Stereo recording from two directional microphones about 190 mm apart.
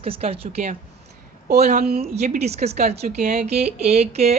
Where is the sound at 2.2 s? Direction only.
35° right (ahead or behind).